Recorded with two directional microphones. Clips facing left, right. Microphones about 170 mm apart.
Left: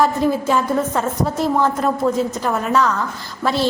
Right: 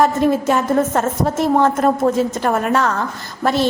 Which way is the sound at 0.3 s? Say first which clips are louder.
Right 2 dB; 65° right (ahead or behind).